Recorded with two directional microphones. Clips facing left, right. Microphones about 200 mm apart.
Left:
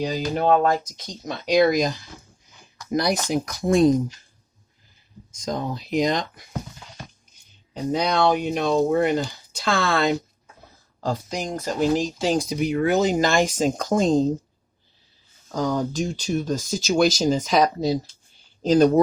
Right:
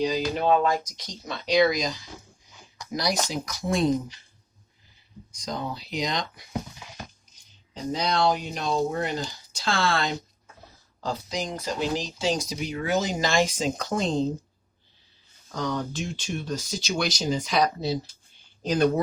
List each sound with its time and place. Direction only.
0.0 s speech: 50° left (ahead or behind)
5.3 s speech: 45° left (ahead or behind)
7.7 s speech: 55° left (ahead or behind)
15.5 s speech: 40° left (ahead or behind)